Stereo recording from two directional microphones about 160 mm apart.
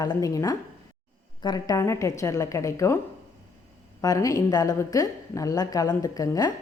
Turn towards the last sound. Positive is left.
turn(degrees=20)  # may be behind; listen again after turning